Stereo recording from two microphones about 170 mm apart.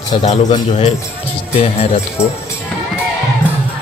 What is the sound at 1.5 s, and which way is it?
Speech, 40° left (ahead or behind).